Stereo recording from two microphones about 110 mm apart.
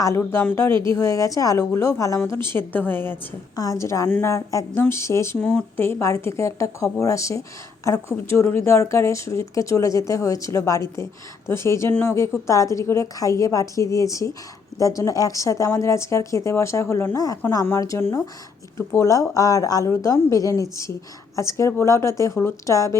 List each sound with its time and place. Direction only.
0.2 s speech: 20° left (ahead or behind)
3.5 s a woman's voice: 30° left (ahead or behind)